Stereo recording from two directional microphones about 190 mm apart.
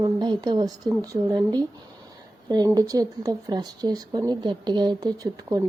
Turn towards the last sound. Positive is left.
turn(degrees=-20)  # may be behind; listen again after turning